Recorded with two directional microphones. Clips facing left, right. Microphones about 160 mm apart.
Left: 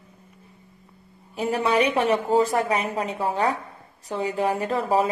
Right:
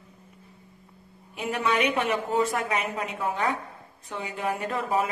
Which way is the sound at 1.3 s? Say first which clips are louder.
Left 4 dB; 35° left (ahead or behind).